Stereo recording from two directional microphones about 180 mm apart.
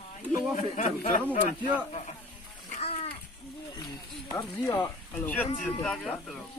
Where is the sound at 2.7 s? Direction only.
35° left (ahead or behind).